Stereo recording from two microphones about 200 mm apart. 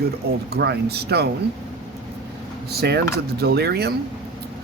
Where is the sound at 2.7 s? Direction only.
55° right (ahead or behind).